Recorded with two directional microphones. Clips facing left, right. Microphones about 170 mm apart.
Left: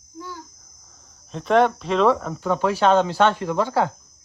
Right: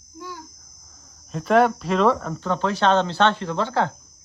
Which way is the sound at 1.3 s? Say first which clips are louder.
Even; 5° right (ahead or behind).